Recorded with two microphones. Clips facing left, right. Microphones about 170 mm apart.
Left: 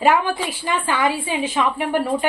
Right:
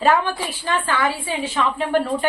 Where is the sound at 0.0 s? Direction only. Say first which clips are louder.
Left 1 dB; 15° left (ahead or behind).